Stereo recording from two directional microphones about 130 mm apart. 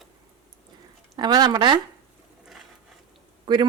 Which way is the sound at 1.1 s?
30° right (ahead or behind).